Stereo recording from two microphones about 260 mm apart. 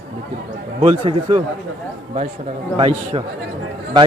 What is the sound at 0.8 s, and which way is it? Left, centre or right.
Speech, right.